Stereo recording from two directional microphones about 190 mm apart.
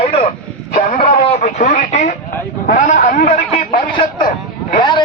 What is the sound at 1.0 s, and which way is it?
A man's voice, 40° left (ahead or behind).